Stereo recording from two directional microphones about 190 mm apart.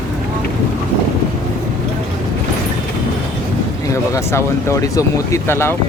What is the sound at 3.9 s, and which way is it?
Speech, 15° left (ahead or behind).